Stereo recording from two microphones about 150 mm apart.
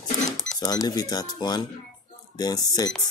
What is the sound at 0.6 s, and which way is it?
Speech, 25° left (ahead or behind).